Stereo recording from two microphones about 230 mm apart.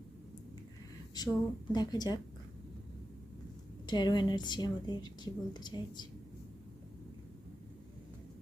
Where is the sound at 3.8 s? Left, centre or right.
Centre.